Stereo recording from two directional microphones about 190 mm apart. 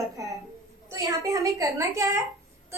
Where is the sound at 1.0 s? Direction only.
15° right (ahead or behind).